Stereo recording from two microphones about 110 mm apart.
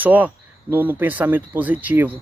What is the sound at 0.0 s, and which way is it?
Speech, 15° right (ahead or behind).